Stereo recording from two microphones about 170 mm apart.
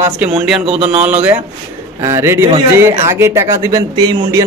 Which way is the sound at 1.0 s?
10° right (ahead or behind).